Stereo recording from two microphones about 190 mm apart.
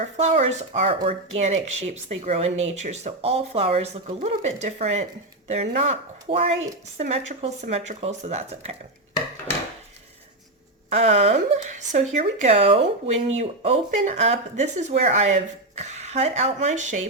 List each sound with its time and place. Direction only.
0.2 s speech: 35° right (ahead or behind)
10.8 s a woman's voice: 35° right (ahead or behind)